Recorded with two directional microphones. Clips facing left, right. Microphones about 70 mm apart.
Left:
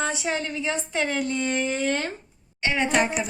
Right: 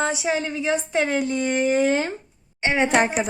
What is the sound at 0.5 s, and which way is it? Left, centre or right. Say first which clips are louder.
A woman's voice: right 5 dB; centre.